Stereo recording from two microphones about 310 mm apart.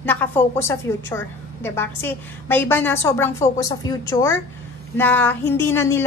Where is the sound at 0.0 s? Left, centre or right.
Centre.